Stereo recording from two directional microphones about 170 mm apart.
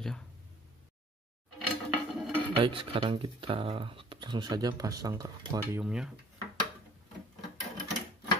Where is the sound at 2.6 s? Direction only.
30° right (ahead or behind).